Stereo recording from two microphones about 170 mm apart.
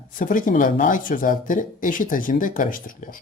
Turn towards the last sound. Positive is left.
turn(degrees=55)  # may be behind; listen again after turning